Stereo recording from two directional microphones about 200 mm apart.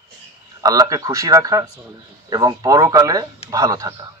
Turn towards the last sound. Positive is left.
turn(degrees=-15)  # may be behind; listen again after turning